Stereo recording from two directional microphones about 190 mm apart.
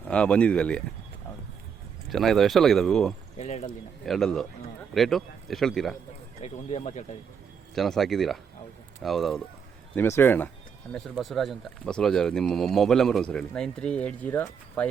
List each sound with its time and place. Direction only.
0.0 s speech: 5° left (ahead or behind)
2.0 s speech: centre (ahead or behind)
3.3 s speech: 35° left (ahead or behind)
4.0 s speech: centre (ahead or behind)
6.4 s speech: 35° left (ahead or behind)
7.8 s speech: centre (ahead or behind)
9.9 s speech: 10° left (ahead or behind)